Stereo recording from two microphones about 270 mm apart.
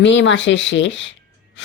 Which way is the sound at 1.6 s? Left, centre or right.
Left.